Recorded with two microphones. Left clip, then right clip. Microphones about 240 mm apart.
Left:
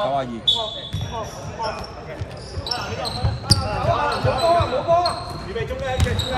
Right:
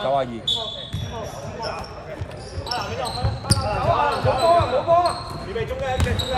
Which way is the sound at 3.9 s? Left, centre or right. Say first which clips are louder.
Right 1 dB; right.